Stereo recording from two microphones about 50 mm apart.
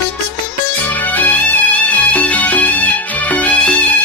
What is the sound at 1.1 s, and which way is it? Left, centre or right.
Music, left.